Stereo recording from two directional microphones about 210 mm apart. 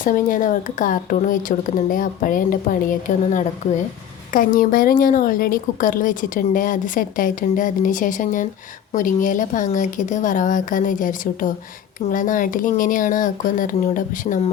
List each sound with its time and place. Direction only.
0.0 s a woman's voice: 40° left (ahead or behind)
4.3 s a woman's voice: 40° left (ahead or behind)